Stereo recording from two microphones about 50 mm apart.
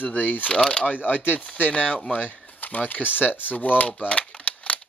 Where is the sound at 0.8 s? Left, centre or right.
Left.